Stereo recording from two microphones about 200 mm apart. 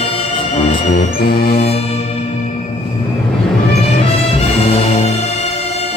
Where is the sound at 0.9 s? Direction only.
55° left (ahead or behind).